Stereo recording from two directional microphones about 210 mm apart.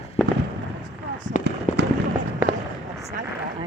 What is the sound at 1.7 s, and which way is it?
Fireworks, 35° left (ahead or behind).